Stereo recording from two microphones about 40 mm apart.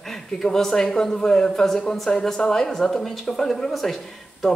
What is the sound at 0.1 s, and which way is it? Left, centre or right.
Speech, centre.